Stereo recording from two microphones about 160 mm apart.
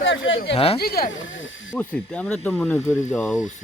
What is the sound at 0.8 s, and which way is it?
Speech, 70° left (ahead or behind).